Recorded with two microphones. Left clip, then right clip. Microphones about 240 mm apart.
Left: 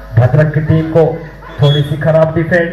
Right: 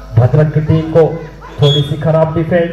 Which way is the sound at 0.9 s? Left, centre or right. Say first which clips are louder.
Right 1 dB; right.